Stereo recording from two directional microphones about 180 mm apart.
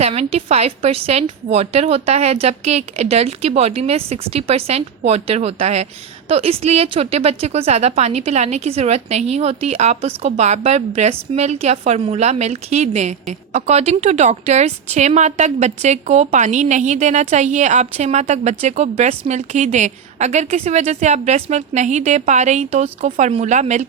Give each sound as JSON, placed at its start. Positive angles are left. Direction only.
{"t": 0.0, "sound": "a woman's voice", "side_deg": -35}